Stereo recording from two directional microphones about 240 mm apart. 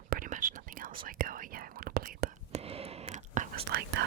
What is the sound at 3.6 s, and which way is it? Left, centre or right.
Whispering, right.